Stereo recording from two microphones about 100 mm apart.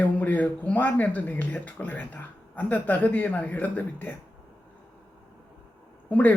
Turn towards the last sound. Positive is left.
turn(degrees=15)  # may be behind; listen again after turning